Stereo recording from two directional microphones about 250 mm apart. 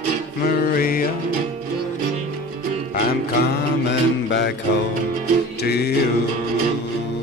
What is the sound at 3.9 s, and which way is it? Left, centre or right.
Music, left.